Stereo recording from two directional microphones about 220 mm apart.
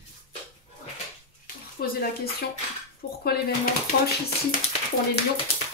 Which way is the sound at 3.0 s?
55° left (ahead or behind).